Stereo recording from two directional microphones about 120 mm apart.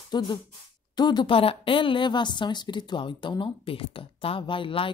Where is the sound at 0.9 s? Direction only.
35° left (ahead or behind).